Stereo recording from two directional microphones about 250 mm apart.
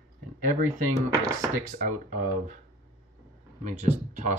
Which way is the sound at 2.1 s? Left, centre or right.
Right.